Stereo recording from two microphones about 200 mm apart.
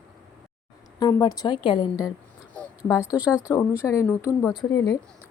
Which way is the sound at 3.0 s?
5° right (ahead or behind).